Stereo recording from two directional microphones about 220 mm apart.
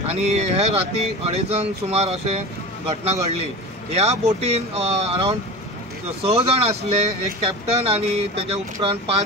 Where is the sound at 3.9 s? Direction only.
30° right (ahead or behind).